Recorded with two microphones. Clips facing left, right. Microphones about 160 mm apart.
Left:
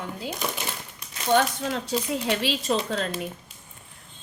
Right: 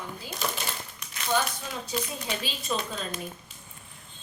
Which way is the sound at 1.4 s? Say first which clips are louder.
Left 6 dB; 75° left (ahead or behind).